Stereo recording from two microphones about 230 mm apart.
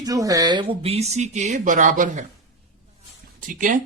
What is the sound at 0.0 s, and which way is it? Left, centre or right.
Speech, centre.